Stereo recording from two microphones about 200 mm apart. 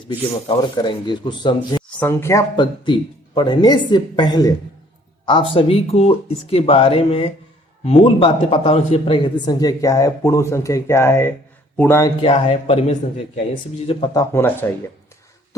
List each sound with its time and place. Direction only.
0.4 s speech: 20° left (ahead or behind)
2.0 s speech: 10° left (ahead or behind)
12.2 s speech: 25° left (ahead or behind); by 14.7 s 10° left (ahead or behind)